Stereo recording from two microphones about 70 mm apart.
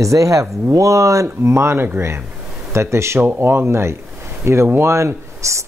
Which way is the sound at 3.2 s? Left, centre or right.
Right.